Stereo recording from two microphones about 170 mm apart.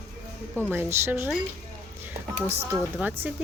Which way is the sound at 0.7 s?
10° right (ahead or behind).